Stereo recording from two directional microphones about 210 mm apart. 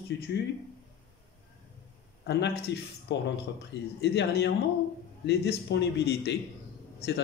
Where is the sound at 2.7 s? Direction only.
55° left (ahead or behind).